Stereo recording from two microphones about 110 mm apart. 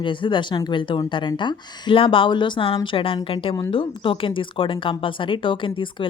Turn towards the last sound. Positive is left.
turn(degrees=50)  # may be behind; listen again after turning